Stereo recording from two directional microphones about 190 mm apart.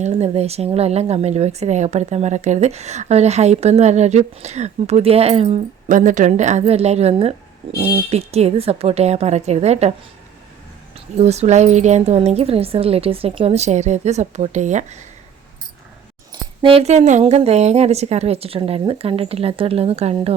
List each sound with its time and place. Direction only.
0.0 s a woman's voice: 35° right (ahead or behind)
10.9 s a woman's voice: 35° right (ahead or behind)
16.3 s a woman's voice: 25° right (ahead or behind)